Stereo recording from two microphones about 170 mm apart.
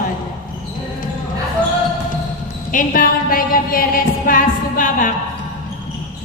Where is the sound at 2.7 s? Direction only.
50° left (ahead or behind).